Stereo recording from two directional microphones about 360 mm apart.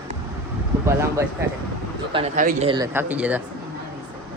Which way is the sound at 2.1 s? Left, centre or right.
Centre.